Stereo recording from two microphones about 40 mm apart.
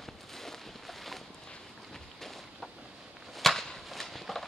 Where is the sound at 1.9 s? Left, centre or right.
Centre.